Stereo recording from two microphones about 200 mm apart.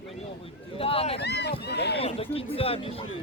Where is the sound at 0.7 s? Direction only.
30° left (ahead or behind).